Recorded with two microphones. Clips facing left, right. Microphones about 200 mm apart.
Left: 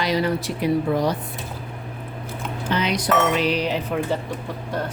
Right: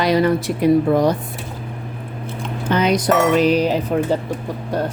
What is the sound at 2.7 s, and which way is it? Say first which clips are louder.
Speech: right 6 dB; 45° right (ahead or behind).